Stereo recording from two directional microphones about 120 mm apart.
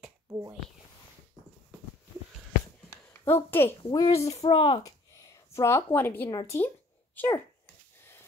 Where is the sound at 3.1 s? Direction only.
20° left (ahead or behind).